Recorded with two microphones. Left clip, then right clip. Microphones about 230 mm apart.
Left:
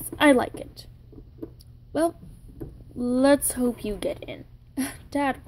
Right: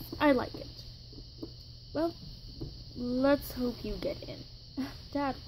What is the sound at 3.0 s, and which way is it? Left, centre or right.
Speech, centre.